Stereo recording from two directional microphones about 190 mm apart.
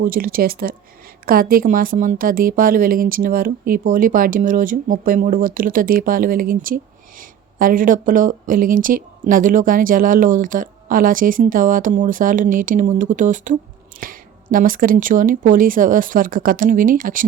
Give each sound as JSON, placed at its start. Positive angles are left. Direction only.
{"t": 0.0, "sound": "speech", "side_deg": -50}